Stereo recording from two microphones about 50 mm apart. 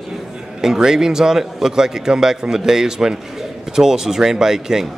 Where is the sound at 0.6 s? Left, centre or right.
Centre.